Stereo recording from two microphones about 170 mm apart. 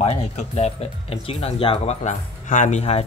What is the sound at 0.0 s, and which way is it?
Speech, 40° left (ahead or behind).